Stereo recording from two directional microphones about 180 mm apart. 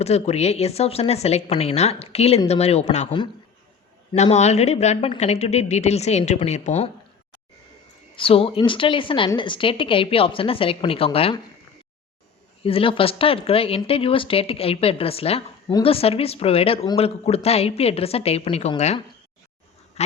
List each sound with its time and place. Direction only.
0.0 s a woman's voice: 35° left (ahead or behind)
8.1 s a woman's voice: 30° left (ahead or behind)
12.6 s a woman's voice: 30° left (ahead or behind)